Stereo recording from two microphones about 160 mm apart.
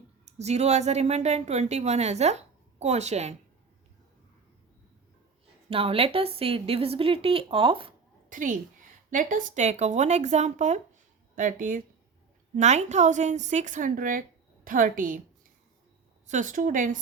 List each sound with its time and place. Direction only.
0.3 s a woman's voice: 45° right (ahead or behind)
5.6 s a woman's voice: 35° right (ahead or behind)
8.3 s a woman's voice: 55° right (ahead or behind)
12.5 s a woman's voice: 45° right (ahead or behind)
16.2 s a woman's voice: 50° right (ahead or behind)